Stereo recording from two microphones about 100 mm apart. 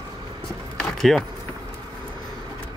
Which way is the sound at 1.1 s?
5° left (ahead or behind).